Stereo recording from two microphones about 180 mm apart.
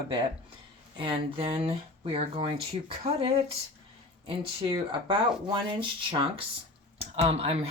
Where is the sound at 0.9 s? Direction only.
30° right (ahead or behind).